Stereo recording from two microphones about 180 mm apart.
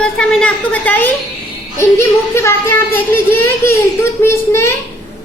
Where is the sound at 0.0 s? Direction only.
5° left (ahead or behind).